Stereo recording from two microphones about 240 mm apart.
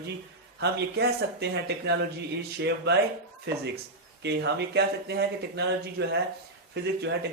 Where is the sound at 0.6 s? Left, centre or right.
Right.